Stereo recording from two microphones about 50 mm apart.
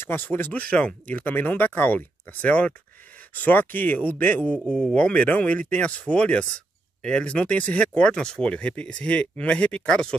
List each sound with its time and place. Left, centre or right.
0.1 s speech: left
3.3 s speech: left
4.6 s speech: left